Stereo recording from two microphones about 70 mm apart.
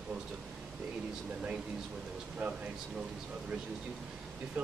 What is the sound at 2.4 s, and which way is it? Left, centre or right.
Speech, right.